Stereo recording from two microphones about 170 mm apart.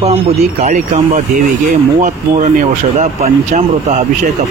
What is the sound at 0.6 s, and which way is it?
Speech, 45° right (ahead or behind).